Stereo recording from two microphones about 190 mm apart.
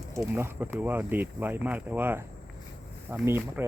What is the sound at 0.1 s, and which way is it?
Speech, 15° right (ahead or behind).